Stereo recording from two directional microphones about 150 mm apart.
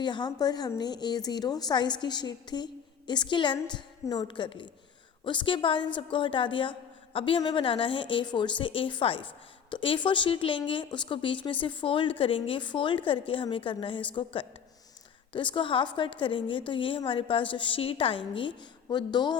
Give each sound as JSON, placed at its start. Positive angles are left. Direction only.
{"t": 0.0, "sound": "speech", "side_deg": 30}